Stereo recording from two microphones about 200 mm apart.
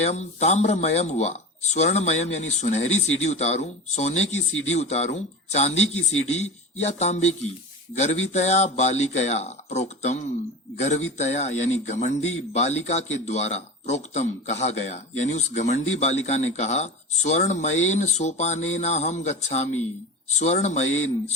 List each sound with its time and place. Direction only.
0.0 s a man's voice: 35° left (ahead or behind)